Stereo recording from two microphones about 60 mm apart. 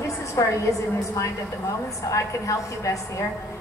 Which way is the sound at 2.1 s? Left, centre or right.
Left.